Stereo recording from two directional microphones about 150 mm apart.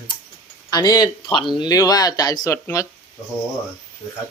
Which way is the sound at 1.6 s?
25° left (ahead or behind).